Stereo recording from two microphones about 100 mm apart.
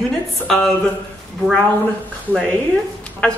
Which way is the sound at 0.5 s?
10° left (ahead or behind).